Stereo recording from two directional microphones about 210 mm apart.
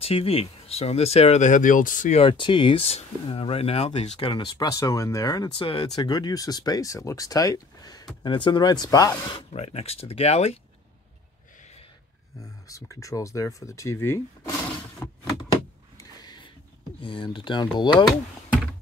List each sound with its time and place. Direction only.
0.0 s speech: 25° left (ahead or behind)
9.3 s speech: 30° left (ahead or behind)
12.6 s speech: 15° left (ahead or behind)
15.5 s a sound: 20° left (ahead or behind)
17.0 s speech: 25° left (ahead or behind)
18.0 s typing: 5° right (ahead or behind)